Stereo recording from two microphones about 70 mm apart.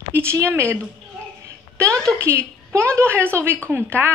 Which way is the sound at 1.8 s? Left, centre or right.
Right.